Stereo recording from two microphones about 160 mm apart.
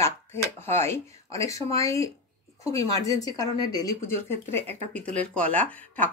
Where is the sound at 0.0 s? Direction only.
15° left (ahead or behind).